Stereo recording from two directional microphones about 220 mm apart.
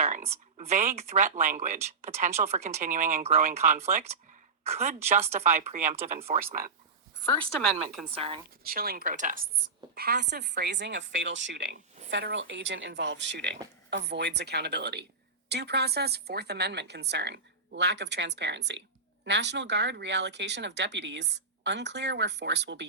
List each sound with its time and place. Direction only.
0.6 s speech: 30° right (ahead or behind)
7.3 s speech: 5° left (ahead or behind)
8.1 s a woman's voice: 25° right (ahead or behind)
8.6 s speech: 40° right (ahead or behind)